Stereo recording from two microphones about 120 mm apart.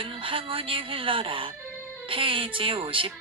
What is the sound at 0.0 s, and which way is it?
A man's voice, 45° right (ahead or behind).